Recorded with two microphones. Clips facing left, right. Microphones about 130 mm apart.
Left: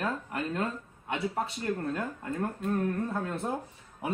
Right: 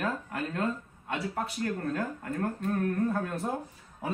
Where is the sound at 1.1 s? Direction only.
25° left (ahead or behind).